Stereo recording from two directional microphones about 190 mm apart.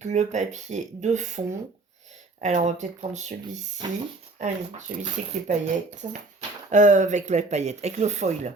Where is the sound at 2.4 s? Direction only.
40° right (ahead or behind).